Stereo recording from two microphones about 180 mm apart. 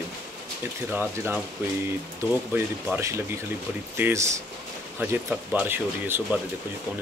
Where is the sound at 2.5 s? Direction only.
15° right (ahead or behind).